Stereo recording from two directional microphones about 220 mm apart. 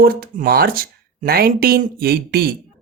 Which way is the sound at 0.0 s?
40° right (ahead or behind).